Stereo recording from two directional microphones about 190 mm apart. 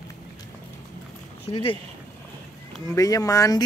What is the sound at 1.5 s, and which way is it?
Speech, 30° left (ahead or behind).